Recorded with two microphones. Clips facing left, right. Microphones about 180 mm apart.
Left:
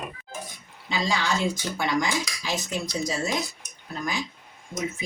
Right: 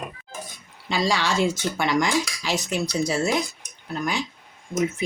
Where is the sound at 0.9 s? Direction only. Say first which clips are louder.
Right 3 dB; 75° right (ahead or behind).